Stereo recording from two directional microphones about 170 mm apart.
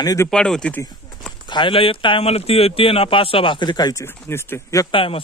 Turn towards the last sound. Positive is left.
turn(degrees=30)  # may be behind; listen again after turning